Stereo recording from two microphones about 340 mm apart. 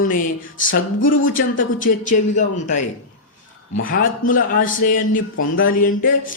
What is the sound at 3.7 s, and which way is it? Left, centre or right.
Speech, left.